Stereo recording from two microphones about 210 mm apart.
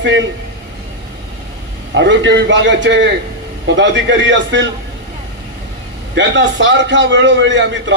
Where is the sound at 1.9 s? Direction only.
60° right (ahead or behind).